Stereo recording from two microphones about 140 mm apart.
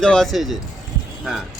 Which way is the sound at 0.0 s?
5° left (ahead or behind).